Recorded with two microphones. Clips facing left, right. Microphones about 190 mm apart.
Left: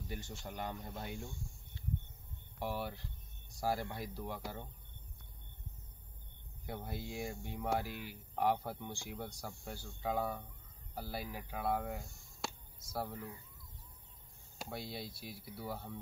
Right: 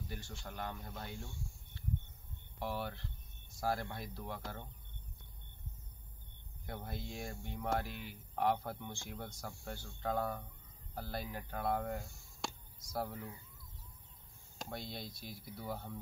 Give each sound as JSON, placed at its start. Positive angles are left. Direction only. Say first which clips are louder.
{"t": 0.1, "sound": "speech", "louder": "left 2 dB", "side_deg": 20}
{"t": 2.6, "sound": "speech", "louder": "left 1 dB", "side_deg": 10}
{"t": 6.6, "sound": "speech", "louder": "left 2 dB", "side_deg": 10}
{"t": 14.6, "sound": "speech", "louder": "left 1 dB", "side_deg": 5}